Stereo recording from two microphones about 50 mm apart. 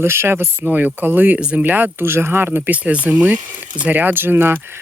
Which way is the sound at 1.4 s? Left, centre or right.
Right.